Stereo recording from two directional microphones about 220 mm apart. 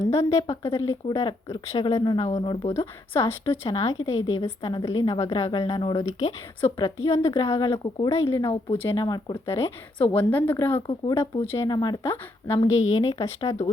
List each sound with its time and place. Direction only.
0.1 s speech: 15° left (ahead or behind)
2.7 s speech: 10° left (ahead or behind)